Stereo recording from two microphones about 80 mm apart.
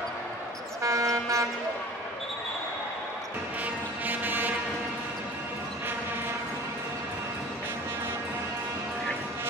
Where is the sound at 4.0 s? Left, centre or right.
Right.